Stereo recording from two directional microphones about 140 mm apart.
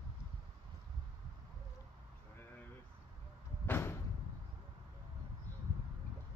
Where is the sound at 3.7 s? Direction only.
15° left (ahead or behind).